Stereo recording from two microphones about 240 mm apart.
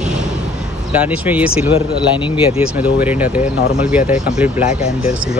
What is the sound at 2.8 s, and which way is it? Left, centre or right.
Speech, centre.